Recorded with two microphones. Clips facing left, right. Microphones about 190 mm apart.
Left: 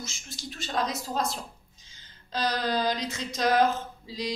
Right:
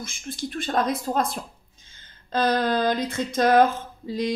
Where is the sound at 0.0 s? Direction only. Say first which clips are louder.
Right 8 dB; 55° right (ahead or behind).